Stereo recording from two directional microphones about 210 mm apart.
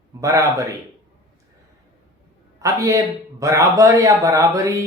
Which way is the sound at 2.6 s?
15° right (ahead or behind).